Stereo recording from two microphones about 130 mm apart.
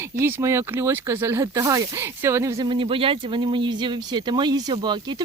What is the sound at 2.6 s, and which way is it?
Speech, 40° right (ahead or behind).